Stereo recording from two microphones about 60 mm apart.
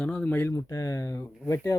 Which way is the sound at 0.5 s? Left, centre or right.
Left.